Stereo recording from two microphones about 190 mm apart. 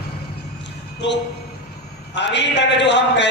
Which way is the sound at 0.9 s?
65° left (ahead or behind).